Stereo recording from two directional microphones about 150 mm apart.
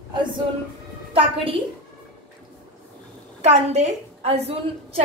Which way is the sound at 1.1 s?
40° right (ahead or behind).